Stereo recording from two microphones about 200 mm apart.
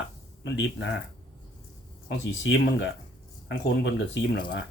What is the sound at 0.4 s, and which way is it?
Speech, 65° left (ahead or behind).